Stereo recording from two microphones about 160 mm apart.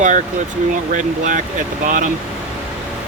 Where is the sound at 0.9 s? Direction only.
50° right (ahead or behind).